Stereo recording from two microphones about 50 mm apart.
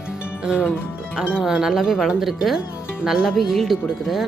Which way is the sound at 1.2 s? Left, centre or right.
Right.